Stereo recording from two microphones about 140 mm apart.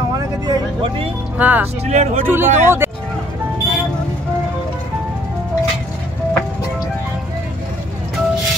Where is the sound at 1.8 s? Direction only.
50° right (ahead or behind).